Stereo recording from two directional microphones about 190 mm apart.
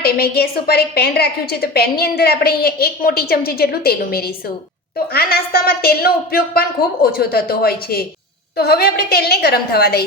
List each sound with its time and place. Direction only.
0.0 s a woman's voice: 55° left (ahead or behind)